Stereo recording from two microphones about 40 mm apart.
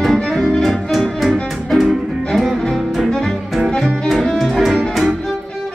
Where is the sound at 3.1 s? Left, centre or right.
Centre.